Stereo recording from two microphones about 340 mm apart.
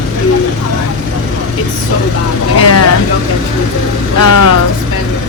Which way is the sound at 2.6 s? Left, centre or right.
Left.